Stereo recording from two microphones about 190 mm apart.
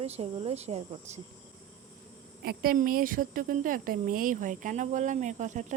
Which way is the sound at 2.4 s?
50° right (ahead or behind).